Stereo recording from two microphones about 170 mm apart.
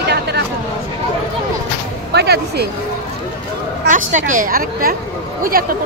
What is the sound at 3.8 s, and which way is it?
A woman's voice, 50° right (ahead or behind).